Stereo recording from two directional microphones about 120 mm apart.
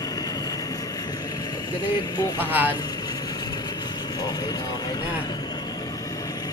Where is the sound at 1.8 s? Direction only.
35° left (ahead or behind).